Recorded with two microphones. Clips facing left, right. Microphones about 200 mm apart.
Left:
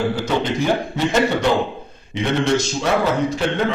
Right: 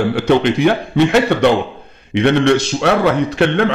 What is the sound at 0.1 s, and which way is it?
A man's voice, 65° right (ahead or behind).